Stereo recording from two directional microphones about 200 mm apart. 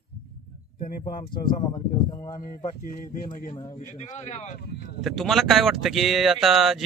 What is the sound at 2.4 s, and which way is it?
Speech, 45° left (ahead or behind).